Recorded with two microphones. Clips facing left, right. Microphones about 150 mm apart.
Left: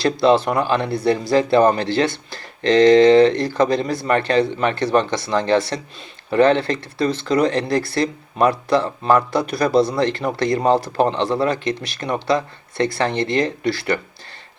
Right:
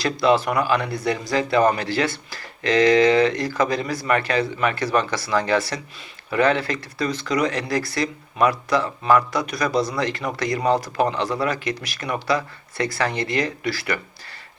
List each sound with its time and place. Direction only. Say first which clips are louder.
0.0 s speech: left 4 dB; 25° left (ahead or behind)